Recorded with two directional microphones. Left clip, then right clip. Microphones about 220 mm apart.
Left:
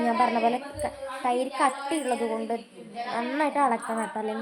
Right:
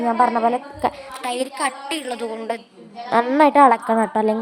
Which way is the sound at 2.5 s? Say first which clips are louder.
Right 4 dB; 40° right (ahead or behind).